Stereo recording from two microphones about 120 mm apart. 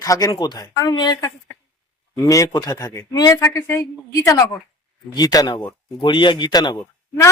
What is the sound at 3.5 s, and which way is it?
A woman's voice, 20° left (ahead or behind).